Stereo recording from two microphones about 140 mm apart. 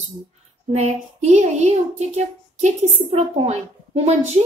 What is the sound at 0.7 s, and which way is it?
A child's voice, 55° right (ahead or behind).